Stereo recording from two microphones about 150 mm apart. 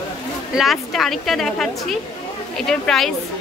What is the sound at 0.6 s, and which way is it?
A woman's voice, centre (ahead or behind).